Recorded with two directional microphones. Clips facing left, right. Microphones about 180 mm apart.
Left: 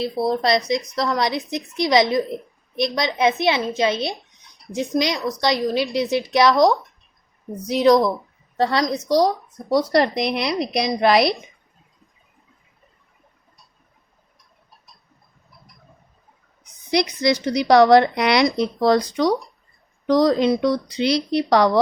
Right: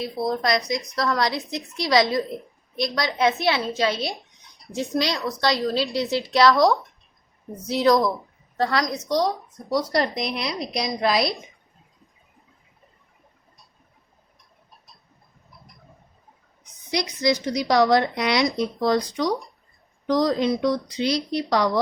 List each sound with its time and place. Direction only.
0.0 s a woman's voice: 30° left (ahead or behind)
9.0 s speech: 35° left (ahead or behind)
9.7 s speech: 65° left (ahead or behind)
16.9 s speech: 65° left (ahead or behind)